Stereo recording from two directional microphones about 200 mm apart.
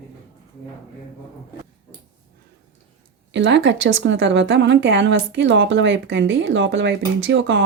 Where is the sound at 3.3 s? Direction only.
60° right (ahead or behind).